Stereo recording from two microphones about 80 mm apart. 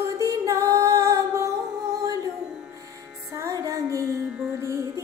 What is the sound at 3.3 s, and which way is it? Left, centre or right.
Music, right.